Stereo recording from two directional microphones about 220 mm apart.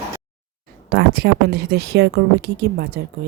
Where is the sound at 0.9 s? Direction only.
45° right (ahead or behind).